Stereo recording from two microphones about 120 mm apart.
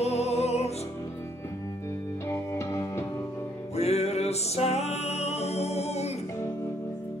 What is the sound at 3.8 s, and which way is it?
Music, 60° left (ahead or behind).